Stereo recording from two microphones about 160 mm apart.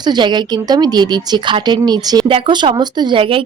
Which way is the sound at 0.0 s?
30° right (ahead or behind).